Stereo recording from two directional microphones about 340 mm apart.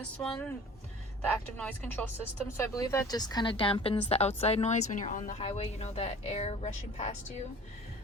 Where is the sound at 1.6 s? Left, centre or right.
Centre.